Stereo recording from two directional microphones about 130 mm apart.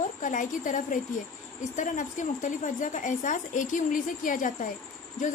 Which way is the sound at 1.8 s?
75° left (ahead or behind).